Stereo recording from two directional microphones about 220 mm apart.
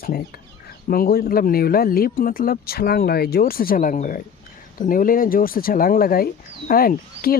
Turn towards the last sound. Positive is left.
turn(degrees=40)  # may be behind; listen again after turning